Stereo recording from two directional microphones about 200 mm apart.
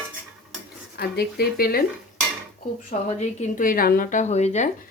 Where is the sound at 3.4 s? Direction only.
40° left (ahead or behind).